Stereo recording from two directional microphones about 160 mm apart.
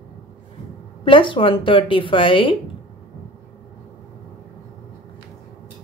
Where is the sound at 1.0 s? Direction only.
30° left (ahead or behind).